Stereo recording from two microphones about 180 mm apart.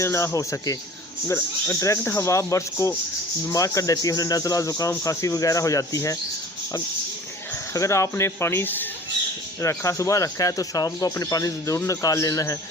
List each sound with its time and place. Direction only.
0.0 s speech: 15° left (ahead or behind)
7.7 s speech: 15° left (ahead or behind)